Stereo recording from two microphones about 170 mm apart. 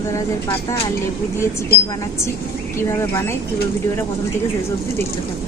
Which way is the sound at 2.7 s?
15° left (ahead or behind).